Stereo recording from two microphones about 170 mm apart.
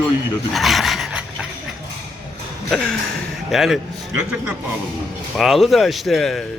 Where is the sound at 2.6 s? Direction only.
Centre (ahead or behind).